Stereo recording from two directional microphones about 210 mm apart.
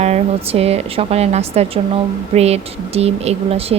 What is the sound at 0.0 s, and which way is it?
A woman's voice, 30° right (ahead or behind).